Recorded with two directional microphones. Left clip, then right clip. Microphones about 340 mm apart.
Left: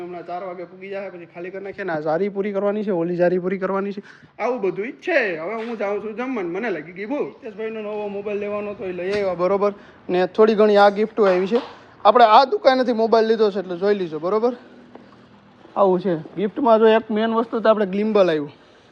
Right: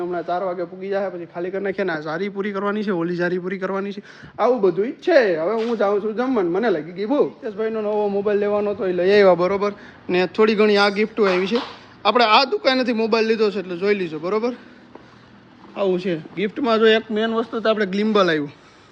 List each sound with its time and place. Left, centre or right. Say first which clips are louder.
0.1 s a man's voice: right 7 dB; right
0.8 s speech: right 7 dB; centre
1.9 s speech: left 3 dB; centre
4.4 s speech: right 5 dB; centre
9.4 s speech: left 1 dB; centre
15.7 s speech: left 4 dB; centre